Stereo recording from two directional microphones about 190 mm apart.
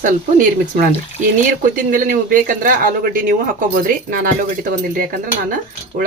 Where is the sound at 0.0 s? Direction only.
45° right (ahead or behind).